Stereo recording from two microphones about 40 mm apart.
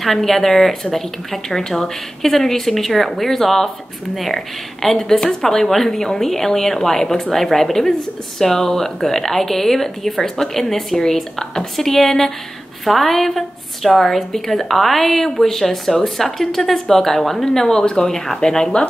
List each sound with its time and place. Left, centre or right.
0.0 s a woman's voice: centre